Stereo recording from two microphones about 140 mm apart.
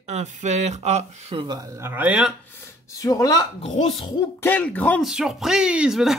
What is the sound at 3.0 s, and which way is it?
Speech, 25° left (ahead or behind).